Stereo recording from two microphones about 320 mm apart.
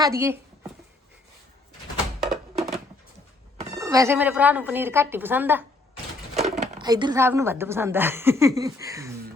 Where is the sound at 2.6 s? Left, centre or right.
Right.